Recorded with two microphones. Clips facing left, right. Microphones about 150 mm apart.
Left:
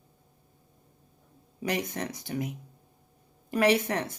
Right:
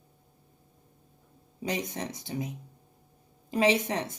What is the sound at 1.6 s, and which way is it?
Speech, 20° right (ahead or behind).